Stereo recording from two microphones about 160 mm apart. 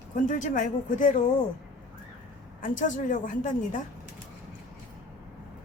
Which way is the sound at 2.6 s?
55° left (ahead or behind).